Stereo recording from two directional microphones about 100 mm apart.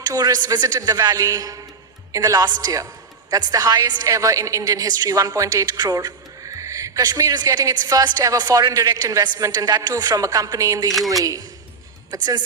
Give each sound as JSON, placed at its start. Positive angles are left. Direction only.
{"t": 0.0, "sound": "a woman's voice", "side_deg": -40}